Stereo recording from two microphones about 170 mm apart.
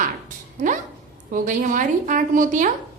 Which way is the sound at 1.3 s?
55° right (ahead or behind).